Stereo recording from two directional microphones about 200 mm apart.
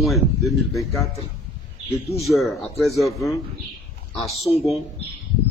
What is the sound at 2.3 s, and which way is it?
Speech, centre (ahead or behind).